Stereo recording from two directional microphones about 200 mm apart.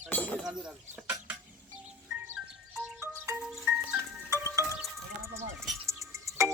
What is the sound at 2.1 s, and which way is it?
Music, 5° right (ahead or behind).